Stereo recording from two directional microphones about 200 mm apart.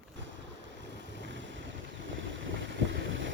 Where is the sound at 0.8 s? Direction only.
65° right (ahead or behind).